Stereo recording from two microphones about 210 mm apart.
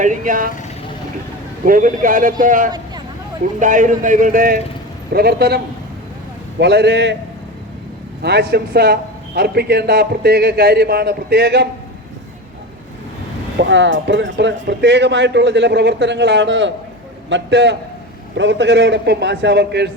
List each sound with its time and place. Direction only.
0.0 s speech: 40° right (ahead or behind)
1.6 s a man's voice: 40° right (ahead or behind)
8.2 s a man's voice: 50° right (ahead or behind)
13.6 s speech: 60° right (ahead or behind)